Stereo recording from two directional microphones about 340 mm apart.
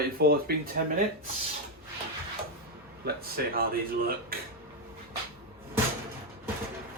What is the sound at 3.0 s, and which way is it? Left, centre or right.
Speech, right.